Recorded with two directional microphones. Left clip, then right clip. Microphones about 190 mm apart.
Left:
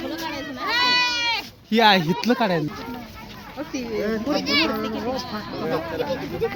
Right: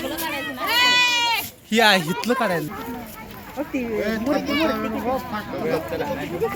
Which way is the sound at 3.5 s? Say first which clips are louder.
Right 3 dB; 35° right (ahead or behind).